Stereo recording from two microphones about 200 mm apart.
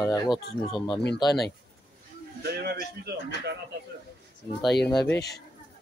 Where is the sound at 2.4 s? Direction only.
50° right (ahead or behind).